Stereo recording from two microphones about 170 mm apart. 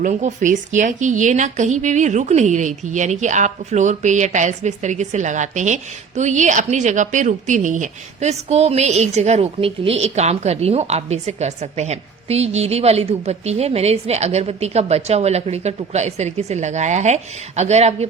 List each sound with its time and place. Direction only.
0.0 s speech: 45° right (ahead or behind)